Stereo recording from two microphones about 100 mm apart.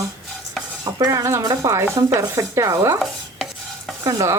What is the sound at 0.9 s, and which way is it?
Speech, 35° right (ahead or behind).